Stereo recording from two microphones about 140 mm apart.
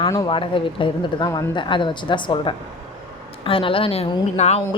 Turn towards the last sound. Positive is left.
turn(degrees=50)  # may be behind; listen again after turning